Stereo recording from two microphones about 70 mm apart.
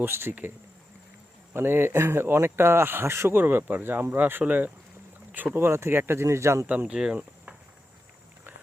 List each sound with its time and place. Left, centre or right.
0.0 s speech: right
1.5 s speech: right
5.5 s speech: right
6.7 s speech: centre